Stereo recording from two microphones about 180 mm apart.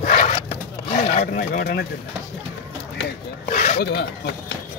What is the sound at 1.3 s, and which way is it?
Speech, 55° left (ahead or behind).